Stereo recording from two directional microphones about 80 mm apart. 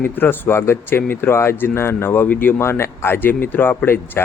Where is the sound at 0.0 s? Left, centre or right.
Left.